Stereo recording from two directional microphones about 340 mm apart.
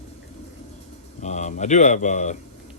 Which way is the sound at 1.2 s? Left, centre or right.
Left.